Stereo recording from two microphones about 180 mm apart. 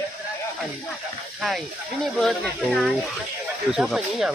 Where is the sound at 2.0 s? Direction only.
Centre (ahead or behind).